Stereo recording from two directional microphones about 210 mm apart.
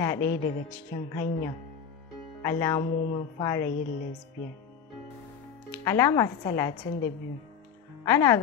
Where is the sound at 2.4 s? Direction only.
15° left (ahead or behind).